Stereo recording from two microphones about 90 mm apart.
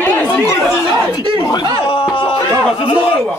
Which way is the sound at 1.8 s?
70° left (ahead or behind).